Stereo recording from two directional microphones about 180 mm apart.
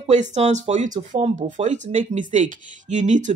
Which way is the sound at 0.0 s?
40° right (ahead or behind).